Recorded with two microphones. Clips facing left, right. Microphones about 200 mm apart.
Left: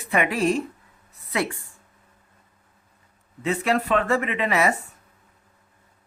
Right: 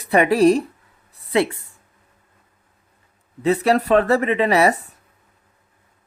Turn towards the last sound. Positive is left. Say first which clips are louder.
# right 6 dB
turn(degrees=-35)  # may be behind; listen again after turning